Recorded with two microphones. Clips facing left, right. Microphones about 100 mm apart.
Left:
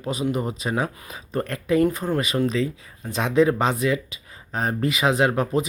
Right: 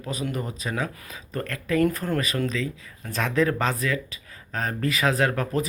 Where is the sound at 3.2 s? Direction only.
20° left (ahead or behind).